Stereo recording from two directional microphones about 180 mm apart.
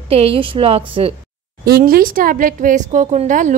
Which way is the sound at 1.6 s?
60° right (ahead or behind).